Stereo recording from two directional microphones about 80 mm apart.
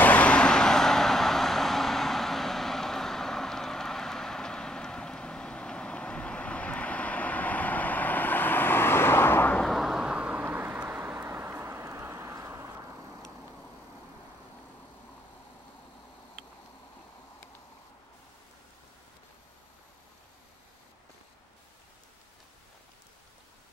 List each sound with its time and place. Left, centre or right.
0.0 s vehicle: centre
9.6 s vehicle: centre; by 12.9 s right